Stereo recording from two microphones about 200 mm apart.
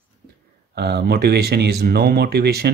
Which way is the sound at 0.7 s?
55° right (ahead or behind).